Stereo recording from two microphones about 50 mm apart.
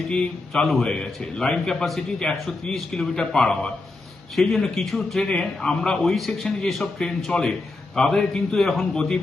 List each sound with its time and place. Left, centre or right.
0.5 s a man's voice: centre
9.0 s a man's voice: centre